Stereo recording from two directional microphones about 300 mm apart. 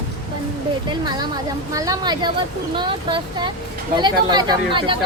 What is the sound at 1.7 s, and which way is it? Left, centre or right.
Speech, centre.